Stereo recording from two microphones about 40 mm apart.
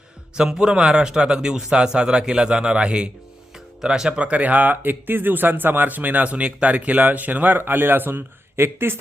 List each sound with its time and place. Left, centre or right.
0.3 s a man's voice: centre
4.2 s speech: right
6.2 s speech: right
7.6 s speech: right